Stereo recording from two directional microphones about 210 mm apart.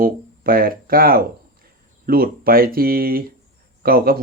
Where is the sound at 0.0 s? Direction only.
45° right (ahead or behind).